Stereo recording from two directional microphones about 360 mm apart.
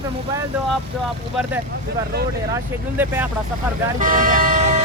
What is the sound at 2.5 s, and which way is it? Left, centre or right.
Speech, centre.